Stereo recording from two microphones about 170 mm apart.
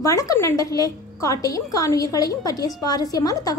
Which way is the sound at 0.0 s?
20° left (ahead or behind).